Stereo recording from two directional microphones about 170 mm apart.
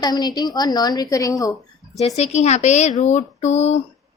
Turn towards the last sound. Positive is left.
turn(degrees=40)  # may be behind; listen again after turning